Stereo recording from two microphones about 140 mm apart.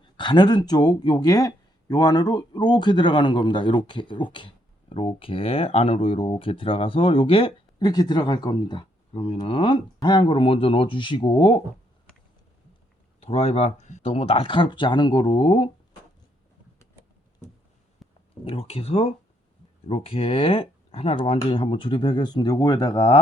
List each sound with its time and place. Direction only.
0.0 s speech: 35° left (ahead or behind)
7.9 s speech: 30° left (ahead or behind)
13.1 s speech: 45° left (ahead or behind)
18.0 s a sound: centre (ahead or behind)
18.4 s speech: 45° left (ahead or behind)